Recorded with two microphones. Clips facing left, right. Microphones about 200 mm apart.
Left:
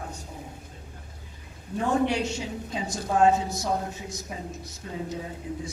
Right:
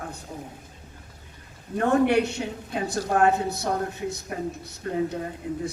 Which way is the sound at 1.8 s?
60° right (ahead or behind).